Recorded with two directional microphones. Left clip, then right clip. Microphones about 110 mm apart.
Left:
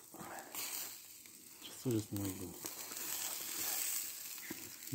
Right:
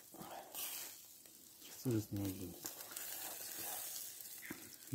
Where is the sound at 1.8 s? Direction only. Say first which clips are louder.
Left 2 dB; 5° right (ahead or behind).